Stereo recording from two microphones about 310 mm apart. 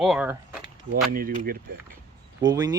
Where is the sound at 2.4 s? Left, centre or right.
Centre.